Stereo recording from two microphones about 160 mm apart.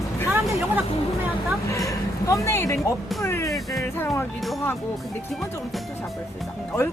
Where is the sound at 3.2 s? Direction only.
15° left (ahead or behind).